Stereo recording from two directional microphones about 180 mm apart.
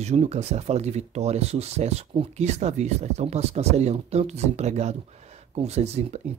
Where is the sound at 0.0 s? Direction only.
40° right (ahead or behind).